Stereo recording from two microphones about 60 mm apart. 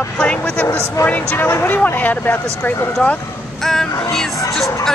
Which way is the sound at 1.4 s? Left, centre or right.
Left.